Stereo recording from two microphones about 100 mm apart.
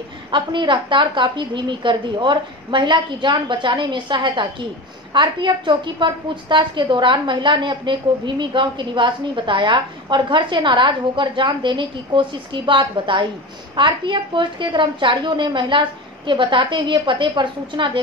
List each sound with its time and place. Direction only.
0.3 s a woman's voice: 50° right (ahead or behind)